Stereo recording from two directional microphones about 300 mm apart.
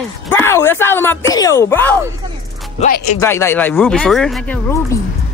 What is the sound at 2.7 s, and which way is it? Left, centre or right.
Speech, left.